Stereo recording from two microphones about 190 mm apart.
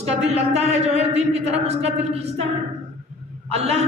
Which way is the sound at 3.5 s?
30° right (ahead or behind).